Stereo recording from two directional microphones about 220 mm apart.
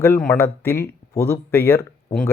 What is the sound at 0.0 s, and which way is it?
Speech, 10° left (ahead or behind).